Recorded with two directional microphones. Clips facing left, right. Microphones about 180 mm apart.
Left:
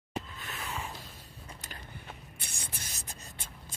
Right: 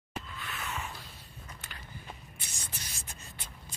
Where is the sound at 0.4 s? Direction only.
35° left (ahead or behind).